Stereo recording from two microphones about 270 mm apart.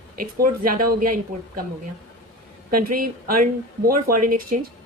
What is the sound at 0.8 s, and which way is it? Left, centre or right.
Speech, right.